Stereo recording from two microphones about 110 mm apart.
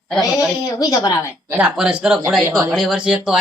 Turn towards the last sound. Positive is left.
turn(degrees=-5)  # may be behind; listen again after turning